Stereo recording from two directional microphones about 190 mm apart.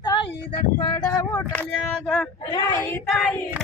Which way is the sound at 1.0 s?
15° left (ahead or behind).